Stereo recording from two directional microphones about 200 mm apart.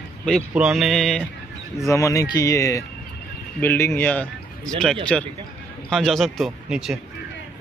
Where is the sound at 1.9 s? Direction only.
15° left (ahead or behind); by 7.0 s centre (ahead or behind).